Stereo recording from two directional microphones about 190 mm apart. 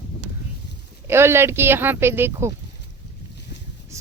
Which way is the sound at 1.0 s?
15° right (ahead or behind).